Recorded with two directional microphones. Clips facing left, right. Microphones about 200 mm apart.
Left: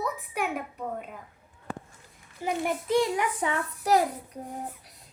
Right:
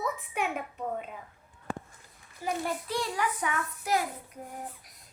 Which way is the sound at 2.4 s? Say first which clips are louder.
Left 3 dB; 20° left (ahead or behind).